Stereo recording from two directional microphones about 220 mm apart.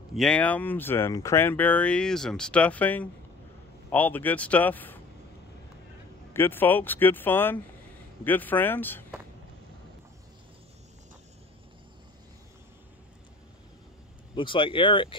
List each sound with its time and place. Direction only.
0.1 s speech: 5° left (ahead or behind)
6.3 s speech: 10° left (ahead or behind)
14.3 s speech: 20° left (ahead or behind)